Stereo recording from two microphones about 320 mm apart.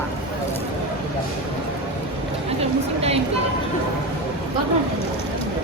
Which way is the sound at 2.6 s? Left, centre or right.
Centre.